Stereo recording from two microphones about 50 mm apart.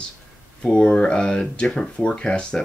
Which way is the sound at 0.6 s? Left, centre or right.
Centre.